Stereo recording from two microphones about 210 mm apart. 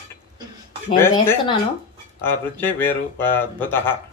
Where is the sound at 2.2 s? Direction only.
10° left (ahead or behind).